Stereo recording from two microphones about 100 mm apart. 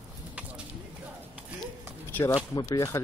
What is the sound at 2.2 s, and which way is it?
Speech, 40° left (ahead or behind).